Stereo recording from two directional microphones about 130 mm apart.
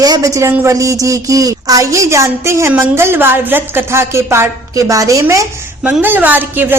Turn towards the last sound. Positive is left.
turn(degrees=-15)  # may be behind; listen again after turning